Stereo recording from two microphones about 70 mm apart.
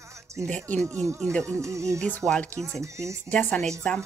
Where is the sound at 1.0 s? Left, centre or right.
Right.